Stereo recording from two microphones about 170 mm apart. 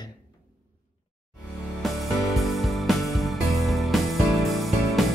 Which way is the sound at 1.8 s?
Centre (ahead or behind).